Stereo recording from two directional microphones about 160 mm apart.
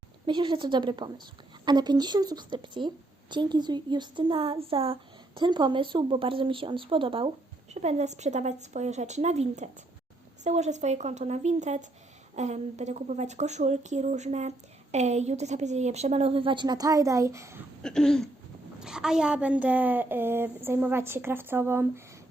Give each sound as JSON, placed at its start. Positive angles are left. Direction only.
{"t": 0.3, "sound": "a woman's voice", "side_deg": -30}
{"t": 7.7, "sound": "a woman's voice", "side_deg": -45}
{"t": 17.8, "sound": "a sound", "side_deg": 5}
{"t": 18.8, "sound": "a woman's voice", "side_deg": -5}